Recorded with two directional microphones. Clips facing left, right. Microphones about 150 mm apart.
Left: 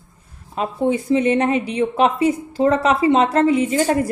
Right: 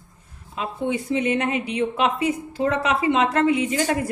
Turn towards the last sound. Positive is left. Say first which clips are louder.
# left 4 dB
turn(degrees=35)  # may be behind; listen again after turning